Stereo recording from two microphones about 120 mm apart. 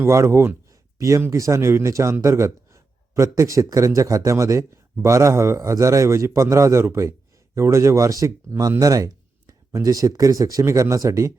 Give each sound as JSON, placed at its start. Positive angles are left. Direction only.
{"t": 0.0, "sound": "speech", "side_deg": -25}